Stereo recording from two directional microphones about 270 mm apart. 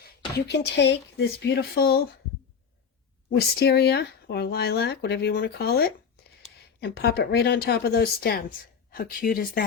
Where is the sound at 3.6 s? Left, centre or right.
Left.